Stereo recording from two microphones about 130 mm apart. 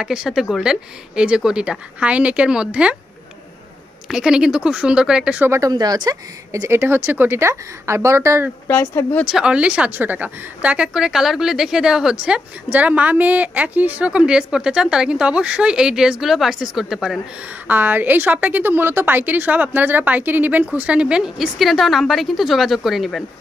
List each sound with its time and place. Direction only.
0.0 s a woman's voice: 5° right (ahead or behind)
4.1 s a woman's voice: 5° right (ahead or behind)
5.7 s a woman's voice: 30° right (ahead or behind)
8.6 s speech: 15° left (ahead or behind)
9.2 s a woman's voice: 5° right (ahead or behind)
17.6 s a woman's voice: 15° right (ahead or behind)